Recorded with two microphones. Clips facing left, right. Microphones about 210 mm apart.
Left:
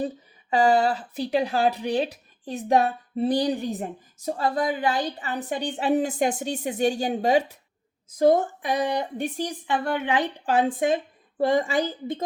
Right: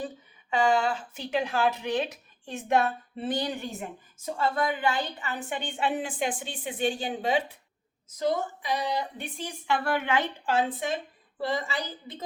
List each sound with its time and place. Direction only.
0.5 s speech: 35° left (ahead or behind)
9.6 s a woman's voice: 15° left (ahead or behind)
10.7 s speech: 45° left (ahead or behind)